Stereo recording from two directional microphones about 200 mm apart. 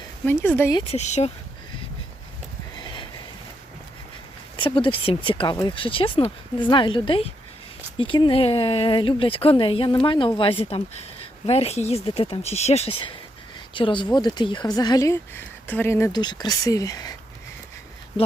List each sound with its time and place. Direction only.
0.3 s speech: 10° left (ahead or behind)
0.7 s speech: 25° left (ahead or behind)
2.8 s a sound: 25° left (ahead or behind)
4.5 s speech: 25° left (ahead or behind)